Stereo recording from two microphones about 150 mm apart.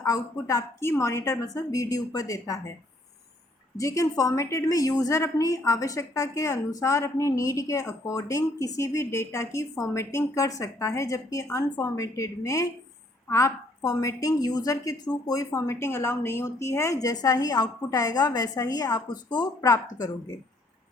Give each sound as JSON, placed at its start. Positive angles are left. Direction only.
{"t": 0.0, "sound": "a woman's voice", "side_deg": 20}
{"t": 3.8, "sound": "a woman's voice", "side_deg": 20}